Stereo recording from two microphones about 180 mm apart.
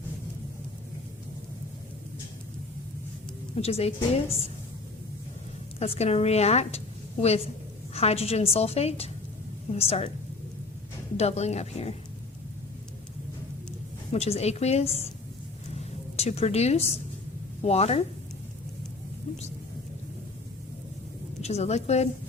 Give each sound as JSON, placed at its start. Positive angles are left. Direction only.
{"t": 3.5, "sound": "a woman's voice", "side_deg": 35}
{"t": 5.8, "sound": "a woman's voice", "side_deg": 35}
{"t": 11.2, "sound": "a woman's voice", "side_deg": 35}
{"t": 14.1, "sound": "a woman's voice", "side_deg": 35}
{"t": 15.7, "sound": "a sound", "side_deg": 35}
{"t": 17.6, "sound": "a woman's voice", "side_deg": 35}
{"t": 21.4, "sound": "a woman's voice", "side_deg": 35}